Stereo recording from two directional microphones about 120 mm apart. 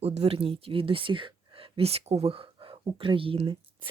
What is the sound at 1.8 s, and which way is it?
Speech, 60° right (ahead or behind).